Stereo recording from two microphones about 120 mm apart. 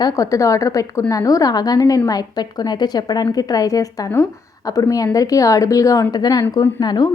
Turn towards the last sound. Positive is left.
turn(degrees=35)  # may be behind; listen again after turning